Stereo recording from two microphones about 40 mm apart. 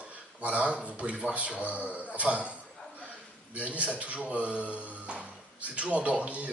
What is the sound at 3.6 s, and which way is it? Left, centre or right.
Speech, right.